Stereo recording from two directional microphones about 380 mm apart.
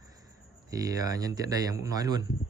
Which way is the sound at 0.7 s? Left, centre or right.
Centre.